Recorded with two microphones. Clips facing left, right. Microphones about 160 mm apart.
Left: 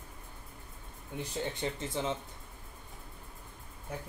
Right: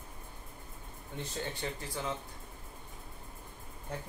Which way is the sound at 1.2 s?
20° left (ahead or behind).